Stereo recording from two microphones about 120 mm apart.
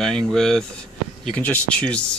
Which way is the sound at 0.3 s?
5° left (ahead or behind).